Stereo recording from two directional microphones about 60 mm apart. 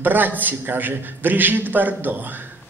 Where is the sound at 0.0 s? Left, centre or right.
Right.